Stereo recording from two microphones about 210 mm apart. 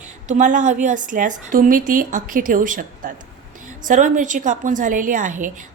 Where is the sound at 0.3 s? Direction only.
35° right (ahead or behind).